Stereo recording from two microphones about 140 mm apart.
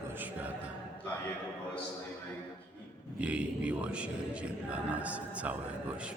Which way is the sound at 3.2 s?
10° right (ahead or behind).